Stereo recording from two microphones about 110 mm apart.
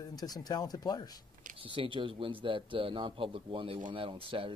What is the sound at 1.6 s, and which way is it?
Speech, 50° right (ahead or behind).